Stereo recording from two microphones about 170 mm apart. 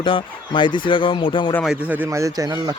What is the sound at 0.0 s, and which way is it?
Speech, 30° left (ahead or behind).